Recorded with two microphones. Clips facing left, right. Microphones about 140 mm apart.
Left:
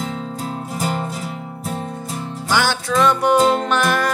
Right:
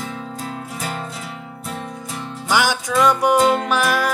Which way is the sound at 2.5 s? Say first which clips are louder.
Even; 10° right (ahead or behind).